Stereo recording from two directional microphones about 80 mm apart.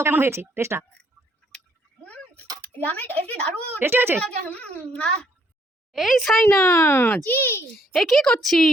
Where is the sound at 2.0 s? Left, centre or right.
Centre.